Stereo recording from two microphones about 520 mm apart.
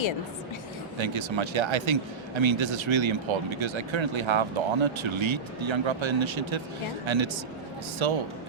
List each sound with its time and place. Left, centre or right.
0.9 s speech: right